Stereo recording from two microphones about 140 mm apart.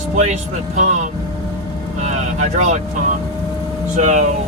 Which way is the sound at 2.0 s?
55° right (ahead or behind).